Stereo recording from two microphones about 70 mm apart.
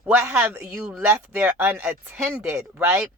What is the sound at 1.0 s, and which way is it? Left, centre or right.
Speech, right.